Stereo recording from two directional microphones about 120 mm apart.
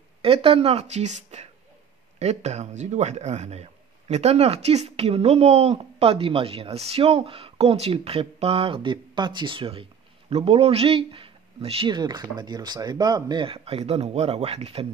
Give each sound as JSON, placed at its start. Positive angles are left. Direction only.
{"t": 0.2, "sound": "speech", "side_deg": -50}
{"t": 11.9, "sound": "speech", "side_deg": -35}